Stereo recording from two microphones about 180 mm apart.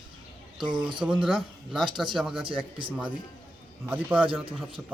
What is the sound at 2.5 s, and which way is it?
Speech, 30° right (ahead or behind).